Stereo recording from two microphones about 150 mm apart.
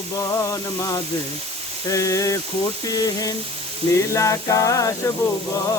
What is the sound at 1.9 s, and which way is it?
Music, 20° left (ahead or behind).